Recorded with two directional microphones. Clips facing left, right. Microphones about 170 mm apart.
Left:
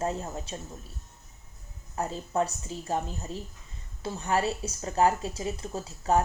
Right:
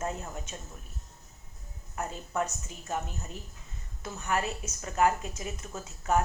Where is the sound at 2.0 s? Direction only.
35° left (ahead or behind).